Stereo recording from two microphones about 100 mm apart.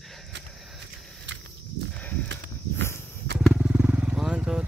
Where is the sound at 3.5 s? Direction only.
15° right (ahead or behind).